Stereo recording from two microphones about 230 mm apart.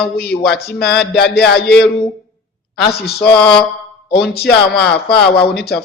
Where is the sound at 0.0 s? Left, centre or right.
Left.